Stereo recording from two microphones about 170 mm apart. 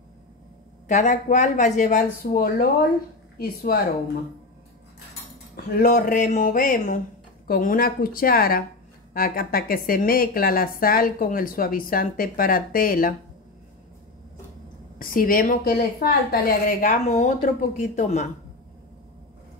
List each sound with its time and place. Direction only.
0.8 s a woman's voice: 45° left (ahead or behind); by 3.8 s 60° left (ahead or behind)
5.8 s a woman's voice: 55° left (ahead or behind)
15.0 s a woman's voice: 55° left (ahead or behind)